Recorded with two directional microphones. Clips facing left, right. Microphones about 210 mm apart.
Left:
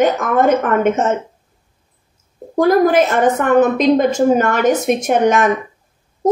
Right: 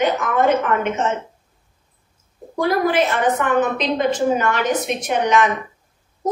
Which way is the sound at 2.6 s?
45° left (ahead or behind).